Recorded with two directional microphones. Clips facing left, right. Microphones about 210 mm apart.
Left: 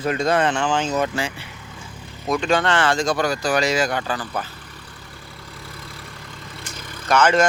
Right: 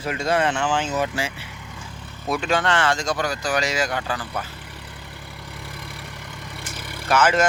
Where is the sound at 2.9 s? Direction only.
55° left (ahead or behind).